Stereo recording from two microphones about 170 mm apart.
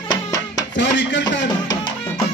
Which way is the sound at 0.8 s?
90° left.